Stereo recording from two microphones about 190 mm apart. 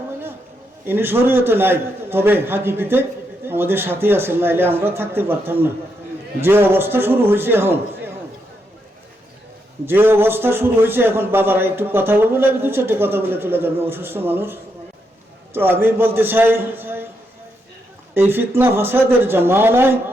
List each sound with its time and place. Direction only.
0.9 s a man's voice: 10° right (ahead or behind)
6.4 s a man's voice: 10° right (ahead or behind)
9.8 s a man's voice: 10° right (ahead or behind)
18.1 s a man's voice: 10° right (ahead or behind)